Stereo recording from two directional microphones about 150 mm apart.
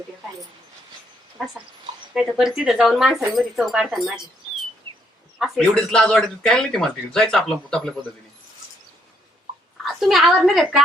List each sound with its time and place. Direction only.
2.1 s speech: 5° right (ahead or behind)
5.4 s speech: centre (ahead or behind)
9.8 s a woman's voice: centre (ahead or behind)